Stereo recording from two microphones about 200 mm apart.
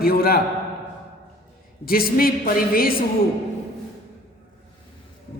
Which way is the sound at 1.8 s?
45° left (ahead or behind).